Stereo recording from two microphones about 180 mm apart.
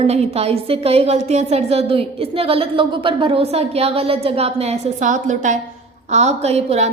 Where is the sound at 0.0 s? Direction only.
35° right (ahead or behind).